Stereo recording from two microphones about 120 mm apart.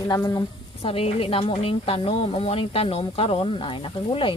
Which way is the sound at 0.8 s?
50° left (ahead or behind).